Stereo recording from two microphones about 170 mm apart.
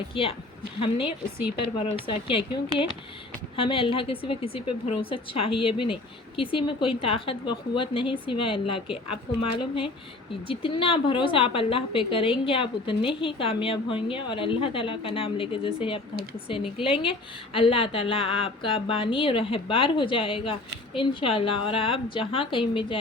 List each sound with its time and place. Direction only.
0.1 s a woman's voice: 35° left (ahead or behind)
10.5 s a woman's voice: 30° left (ahead or behind)